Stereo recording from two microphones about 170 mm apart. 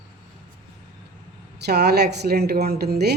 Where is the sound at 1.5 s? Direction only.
75° right (ahead or behind).